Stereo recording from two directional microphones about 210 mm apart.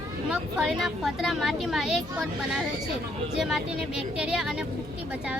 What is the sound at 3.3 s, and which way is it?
Speech, centre (ahead or behind).